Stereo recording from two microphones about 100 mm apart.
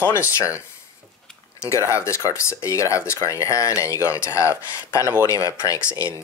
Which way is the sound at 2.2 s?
30° left (ahead or behind).